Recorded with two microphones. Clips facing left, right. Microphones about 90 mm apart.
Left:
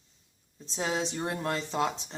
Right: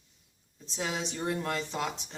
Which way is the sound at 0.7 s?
35° left (ahead or behind).